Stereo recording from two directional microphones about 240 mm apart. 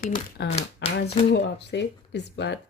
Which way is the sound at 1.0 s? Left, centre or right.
Left.